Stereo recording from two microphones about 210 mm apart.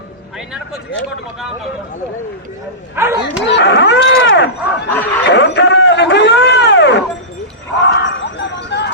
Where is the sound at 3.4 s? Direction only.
55° left (ahead or behind).